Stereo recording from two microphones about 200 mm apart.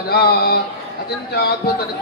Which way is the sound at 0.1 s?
50° left (ahead or behind).